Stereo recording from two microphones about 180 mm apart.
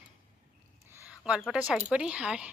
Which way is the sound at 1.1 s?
5° right (ahead or behind).